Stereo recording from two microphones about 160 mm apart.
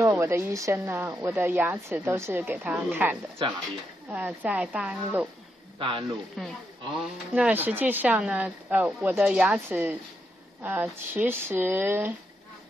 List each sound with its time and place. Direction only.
0.0 s speech: 15° right (ahead or behind)
5.8 s speech: 35° right (ahead or behind)
6.4 s speech: centre (ahead or behind)
7.3 s speech: 10° right (ahead or behind)